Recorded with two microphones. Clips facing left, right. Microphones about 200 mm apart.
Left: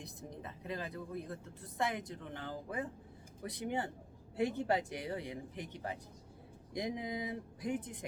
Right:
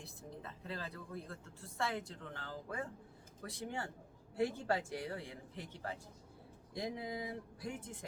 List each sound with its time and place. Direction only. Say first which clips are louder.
0.0 s speech: left 3 dB; 15° left (ahead or behind)